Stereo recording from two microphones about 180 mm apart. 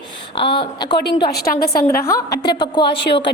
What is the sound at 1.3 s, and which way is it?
Speech, 60° left (ahead or behind).